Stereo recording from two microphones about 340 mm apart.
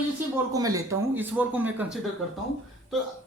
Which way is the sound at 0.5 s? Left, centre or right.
Centre.